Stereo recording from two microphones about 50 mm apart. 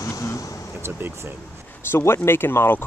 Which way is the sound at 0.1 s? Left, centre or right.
Left.